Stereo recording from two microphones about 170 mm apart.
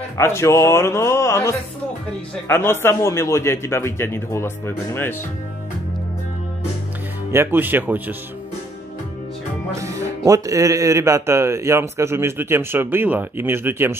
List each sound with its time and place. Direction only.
0.2 s a man's voice: 15° left (ahead or behind)
7.3 s speech: 10° right (ahead or behind)
9.8 s speech: 20° right (ahead or behind)